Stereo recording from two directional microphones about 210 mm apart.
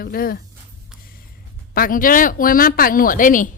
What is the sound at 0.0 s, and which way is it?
Speech, 45° left (ahead or behind).